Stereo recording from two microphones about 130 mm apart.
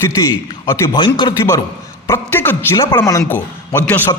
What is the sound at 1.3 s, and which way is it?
Speech, 20° left (ahead or behind).